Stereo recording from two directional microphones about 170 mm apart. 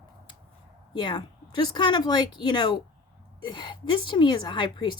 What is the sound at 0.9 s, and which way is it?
A woman's voice, 25° left (ahead or behind).